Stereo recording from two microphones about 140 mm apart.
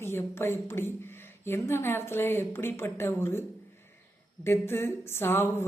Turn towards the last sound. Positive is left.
turn(degrees=15)  # may be behind; listen again after turning